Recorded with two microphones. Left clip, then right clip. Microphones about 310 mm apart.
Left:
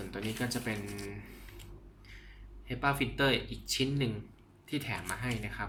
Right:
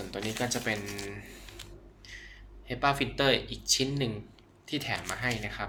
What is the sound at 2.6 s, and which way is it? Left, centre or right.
Speech, centre.